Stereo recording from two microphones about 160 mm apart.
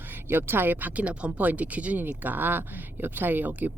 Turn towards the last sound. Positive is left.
turn(degrees=-10)  # may be behind; listen again after turning